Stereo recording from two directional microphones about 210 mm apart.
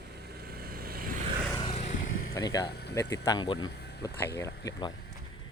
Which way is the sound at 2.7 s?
50° left (ahead or behind).